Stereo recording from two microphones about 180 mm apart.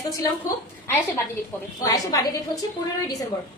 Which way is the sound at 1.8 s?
20° left (ahead or behind).